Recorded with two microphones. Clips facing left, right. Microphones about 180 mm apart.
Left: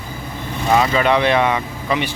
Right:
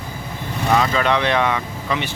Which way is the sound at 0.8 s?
10° left (ahead or behind).